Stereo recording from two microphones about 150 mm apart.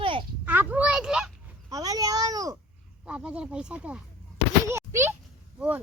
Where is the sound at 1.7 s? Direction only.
25° right (ahead or behind).